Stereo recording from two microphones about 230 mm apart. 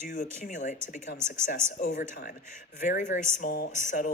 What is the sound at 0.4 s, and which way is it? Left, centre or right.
Speech, left.